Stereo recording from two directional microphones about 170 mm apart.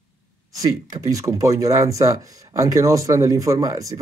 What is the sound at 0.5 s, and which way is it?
Speech, 20° right (ahead or behind).